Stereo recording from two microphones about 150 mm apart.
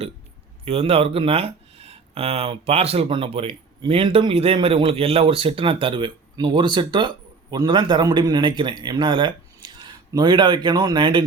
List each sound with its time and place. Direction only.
0.6 s speech: 40° right (ahead or behind)